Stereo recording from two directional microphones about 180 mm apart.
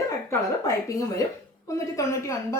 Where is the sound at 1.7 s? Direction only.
15° left (ahead or behind).